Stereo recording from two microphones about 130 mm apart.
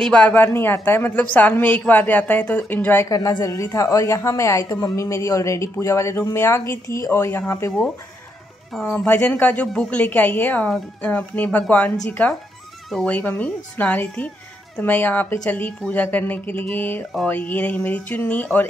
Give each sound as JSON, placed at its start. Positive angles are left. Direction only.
{"t": 0.0, "sound": "a woman's voice", "side_deg": 10}
{"t": 3.1, "sound": "a woman's voice", "side_deg": 30}
{"t": 8.8, "sound": "a woman's voice", "side_deg": 15}